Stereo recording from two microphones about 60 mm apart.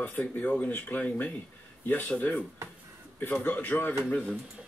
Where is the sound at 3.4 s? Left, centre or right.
Left.